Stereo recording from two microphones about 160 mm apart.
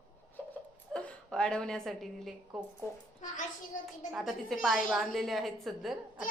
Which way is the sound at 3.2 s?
50° left (ahead or behind).